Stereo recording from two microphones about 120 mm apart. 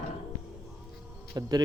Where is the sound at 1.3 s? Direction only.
30° right (ahead or behind).